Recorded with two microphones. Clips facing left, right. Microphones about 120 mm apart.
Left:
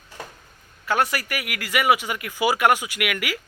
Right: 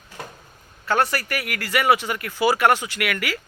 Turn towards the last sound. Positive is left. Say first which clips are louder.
# right 1 dB
turn(degrees=15)  # may be behind; listen again after turning